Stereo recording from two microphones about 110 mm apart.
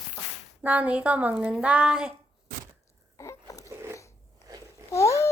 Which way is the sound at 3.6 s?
25° right (ahead or behind).